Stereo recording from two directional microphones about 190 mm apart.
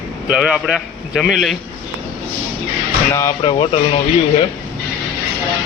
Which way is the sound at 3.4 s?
30° left (ahead or behind).